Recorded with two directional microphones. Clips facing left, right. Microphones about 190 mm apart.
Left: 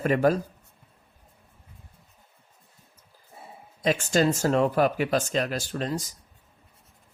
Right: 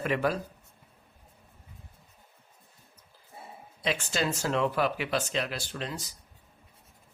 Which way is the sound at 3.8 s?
45° left (ahead or behind).